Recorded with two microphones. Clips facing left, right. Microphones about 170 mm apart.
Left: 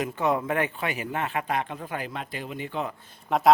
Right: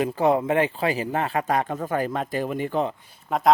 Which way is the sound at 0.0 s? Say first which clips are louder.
Right 5 dB; 35° right (ahead or behind).